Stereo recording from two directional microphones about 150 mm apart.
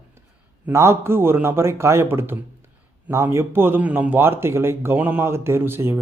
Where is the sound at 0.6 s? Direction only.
20° right (ahead or behind).